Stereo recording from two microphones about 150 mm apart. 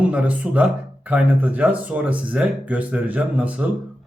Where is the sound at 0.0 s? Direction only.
10° right (ahead or behind).